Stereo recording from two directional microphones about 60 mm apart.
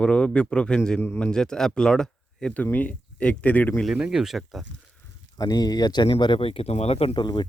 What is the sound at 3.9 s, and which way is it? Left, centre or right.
Speech, centre.